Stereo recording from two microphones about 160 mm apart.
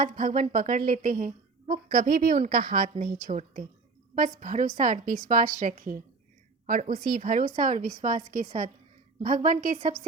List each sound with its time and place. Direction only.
0.0 s a woman's voice: 55° right (ahead or behind)